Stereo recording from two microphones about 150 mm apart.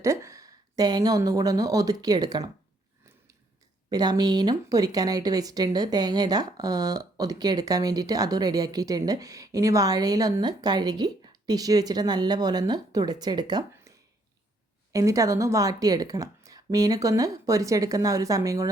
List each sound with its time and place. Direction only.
0.0 s speech: 20° right (ahead or behind)
3.8 s speech: 25° right (ahead or behind)
14.9 s speech: 20° right (ahead or behind)